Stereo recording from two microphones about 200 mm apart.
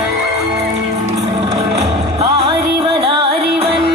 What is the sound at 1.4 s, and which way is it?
Music, 30° right (ahead or behind).